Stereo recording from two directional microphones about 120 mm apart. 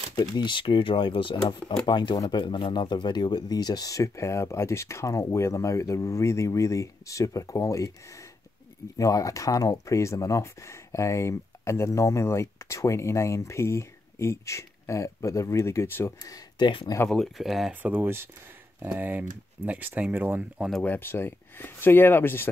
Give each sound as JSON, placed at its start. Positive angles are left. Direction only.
{"t": 0.4, "sound": "speech", "side_deg": 40}
{"t": 1.6, "sound": "speech", "side_deg": 10}
{"t": 1.9, "sound": "speech", "side_deg": 40}
{"t": 8.9, "sound": "speech", "side_deg": 30}
{"t": 16.5, "sound": "speech", "side_deg": 40}
{"t": 17.1, "sound": "speech", "side_deg": 0}
{"t": 17.8, "sound": "speech", "side_deg": -15}
{"t": 20.8, "sound": "speech", "side_deg": 15}